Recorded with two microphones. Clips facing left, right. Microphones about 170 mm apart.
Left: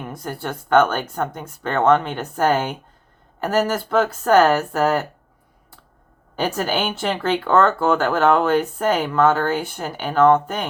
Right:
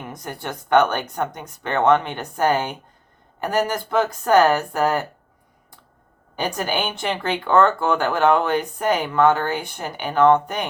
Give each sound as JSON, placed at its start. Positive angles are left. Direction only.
{"t": 0.3, "sound": "speech", "side_deg": -20}
{"t": 6.3, "sound": "speech", "side_deg": -15}